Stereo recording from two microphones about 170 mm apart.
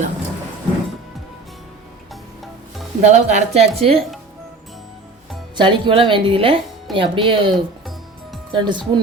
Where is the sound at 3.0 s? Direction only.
40° right (ahead or behind).